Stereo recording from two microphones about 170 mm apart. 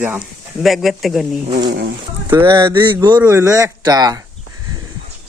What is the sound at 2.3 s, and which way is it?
Speech, 15° right (ahead or behind).